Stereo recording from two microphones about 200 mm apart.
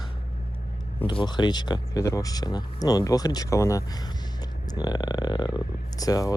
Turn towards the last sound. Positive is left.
turn(degrees=15)  # may be behind; listen again after turning